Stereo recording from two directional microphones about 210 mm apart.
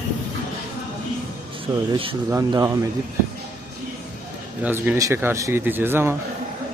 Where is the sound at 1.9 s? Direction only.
25° right (ahead or behind).